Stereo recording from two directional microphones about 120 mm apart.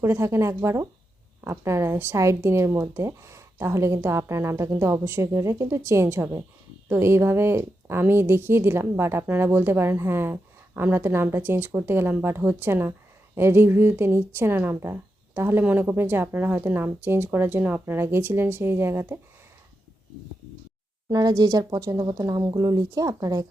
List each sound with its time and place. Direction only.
0.0 s a woman's voice: 25° right (ahead or behind)
21.1 s speech: 30° right (ahead or behind)